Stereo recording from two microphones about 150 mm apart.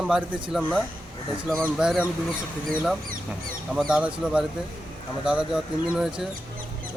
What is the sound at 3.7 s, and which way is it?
Speech, 5° right (ahead or behind).